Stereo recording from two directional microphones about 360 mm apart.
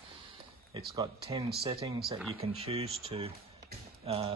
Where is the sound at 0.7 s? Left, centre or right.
Centre.